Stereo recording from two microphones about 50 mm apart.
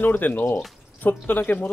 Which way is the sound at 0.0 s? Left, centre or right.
Left.